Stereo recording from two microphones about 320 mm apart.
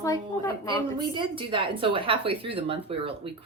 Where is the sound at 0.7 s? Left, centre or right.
Centre.